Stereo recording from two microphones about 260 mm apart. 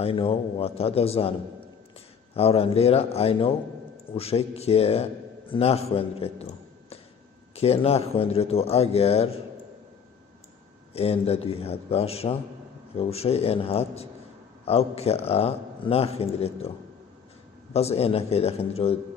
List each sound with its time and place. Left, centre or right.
0.0 s speech: left
2.3 s a man's voice: left
10.9 s speech: left
17.7 s speech: left